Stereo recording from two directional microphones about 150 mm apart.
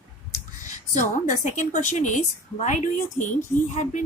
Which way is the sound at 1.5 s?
55° left (ahead or behind).